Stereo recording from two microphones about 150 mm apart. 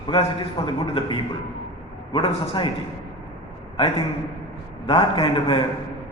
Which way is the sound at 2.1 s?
35° left (ahead or behind).